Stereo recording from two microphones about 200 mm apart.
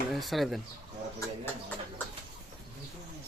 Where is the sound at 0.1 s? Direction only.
Centre (ahead or behind).